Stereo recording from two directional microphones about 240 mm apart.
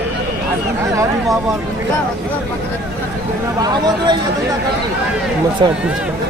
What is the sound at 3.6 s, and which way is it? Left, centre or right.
Speech, centre.